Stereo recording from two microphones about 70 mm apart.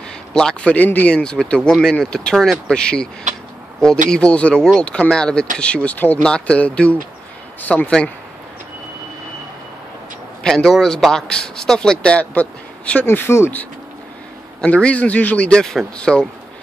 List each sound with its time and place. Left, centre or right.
0.3 s speech: centre
1.1 s a man's voice: centre
10.4 s speech: centre
13.0 s speech: left
14.6 s a man's voice: centre